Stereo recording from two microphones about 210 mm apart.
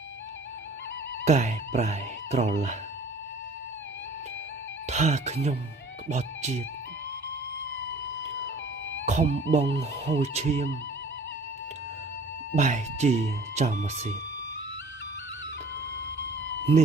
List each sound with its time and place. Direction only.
1.2 s speech: 35° right (ahead or behind)
4.8 s speech: 35° right (ahead or behind)
9.0 s speech: 30° right (ahead or behind)
12.5 s speech: 35° right (ahead or behind)